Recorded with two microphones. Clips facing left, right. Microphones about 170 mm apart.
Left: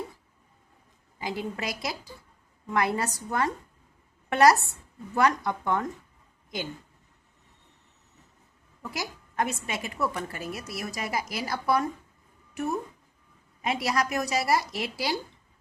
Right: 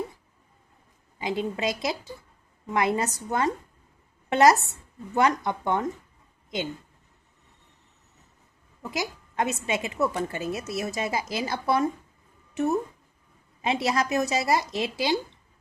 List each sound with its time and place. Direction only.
1.2 s a woman's voice: 20° right (ahead or behind)
8.8 s a woman's voice: 20° right (ahead or behind)